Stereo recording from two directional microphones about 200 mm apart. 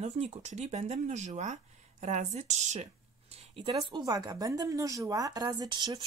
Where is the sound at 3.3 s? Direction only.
30° right (ahead or behind).